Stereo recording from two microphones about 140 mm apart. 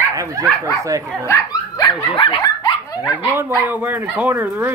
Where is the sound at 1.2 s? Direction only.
20° left (ahead or behind).